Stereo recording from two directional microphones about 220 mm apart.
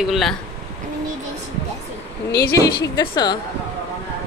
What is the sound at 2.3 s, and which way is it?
Speech, 45° left (ahead or behind).